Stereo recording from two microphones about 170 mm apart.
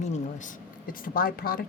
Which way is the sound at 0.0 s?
45° left (ahead or behind).